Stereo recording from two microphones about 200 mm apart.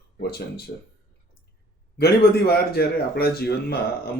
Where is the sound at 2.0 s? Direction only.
50° left (ahead or behind).